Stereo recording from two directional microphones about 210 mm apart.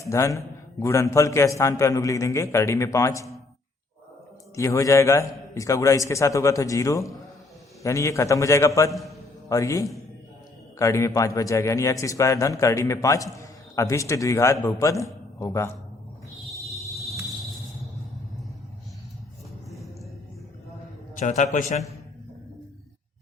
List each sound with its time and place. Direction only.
0.0 s a man's voice: 15° left (ahead or behind)
4.5 s a man's voice: 15° left (ahead or behind)
16.7 s a sound: centre (ahead or behind)
21.2 s a man's voice: 35° left (ahead or behind)